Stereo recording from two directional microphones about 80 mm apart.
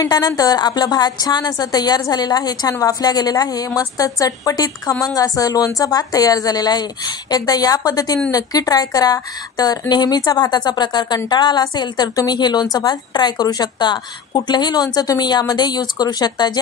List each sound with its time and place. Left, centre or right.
0.0 s a woman's voice: left